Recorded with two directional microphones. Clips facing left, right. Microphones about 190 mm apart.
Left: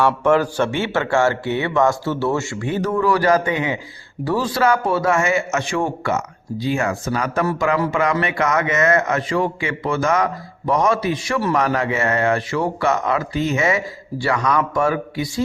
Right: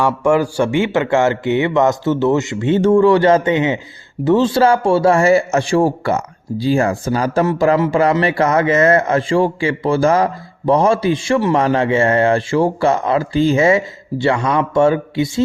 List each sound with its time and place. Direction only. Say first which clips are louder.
0.0 s a man's voice: right 2 dB; 10° right (ahead or behind)